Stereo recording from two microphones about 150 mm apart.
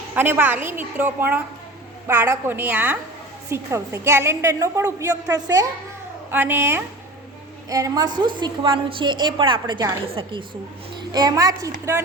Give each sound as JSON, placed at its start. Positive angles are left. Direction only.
{"t": 0.1, "sound": "a woman's voice", "side_deg": -15}
{"t": 6.3, "sound": "a woman's voice", "side_deg": -15}